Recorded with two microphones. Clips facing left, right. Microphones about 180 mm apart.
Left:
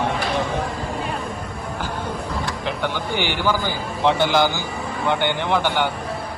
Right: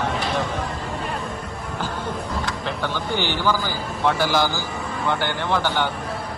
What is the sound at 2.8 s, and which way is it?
A man's voice, 15° left (ahead or behind).